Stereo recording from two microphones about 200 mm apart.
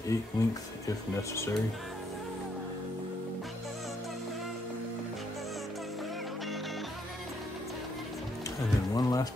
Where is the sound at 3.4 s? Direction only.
Centre (ahead or behind).